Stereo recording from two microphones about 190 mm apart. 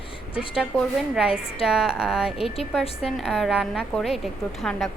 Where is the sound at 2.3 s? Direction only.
30° left (ahead or behind).